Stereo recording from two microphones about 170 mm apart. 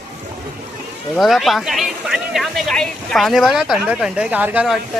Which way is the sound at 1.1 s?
Centre (ahead or behind).